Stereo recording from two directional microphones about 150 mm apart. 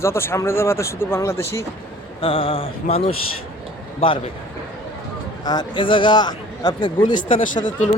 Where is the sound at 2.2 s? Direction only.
35° left (ahead or behind).